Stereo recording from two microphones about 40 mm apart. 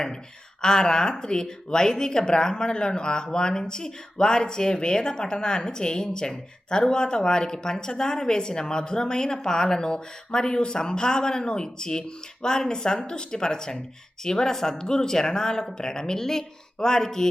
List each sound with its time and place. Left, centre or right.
0.6 s speech: centre